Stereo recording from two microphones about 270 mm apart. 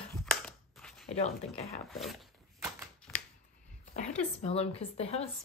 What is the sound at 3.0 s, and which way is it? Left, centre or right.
Shuffling cards, centre.